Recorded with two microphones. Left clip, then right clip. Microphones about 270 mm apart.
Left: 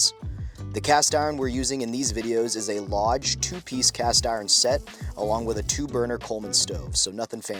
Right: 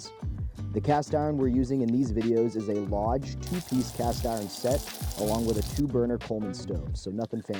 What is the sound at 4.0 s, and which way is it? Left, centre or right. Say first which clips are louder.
Speech: left 6 dB; centre.